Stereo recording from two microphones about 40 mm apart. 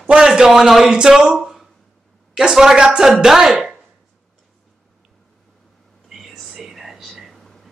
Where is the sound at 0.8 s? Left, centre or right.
Right.